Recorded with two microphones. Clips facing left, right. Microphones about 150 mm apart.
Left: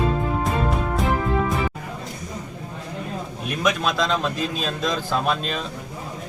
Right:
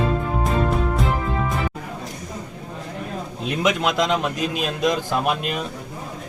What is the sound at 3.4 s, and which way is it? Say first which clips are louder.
Speech: right 2 dB; 20° right (ahead or behind).